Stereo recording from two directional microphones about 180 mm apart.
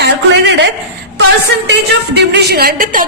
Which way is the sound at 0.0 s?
70° right (ahead or behind).